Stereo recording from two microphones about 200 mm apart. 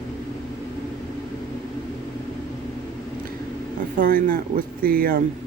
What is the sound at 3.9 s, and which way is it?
Speech, 45° right (ahead or behind).